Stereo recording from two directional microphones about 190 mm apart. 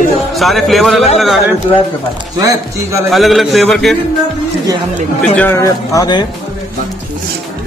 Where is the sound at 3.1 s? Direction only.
Centre (ahead or behind).